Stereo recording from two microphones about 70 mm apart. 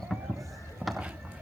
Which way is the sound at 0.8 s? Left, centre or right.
Right.